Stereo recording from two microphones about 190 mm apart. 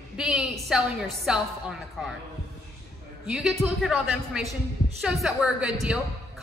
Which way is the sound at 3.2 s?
5° right (ahead or behind).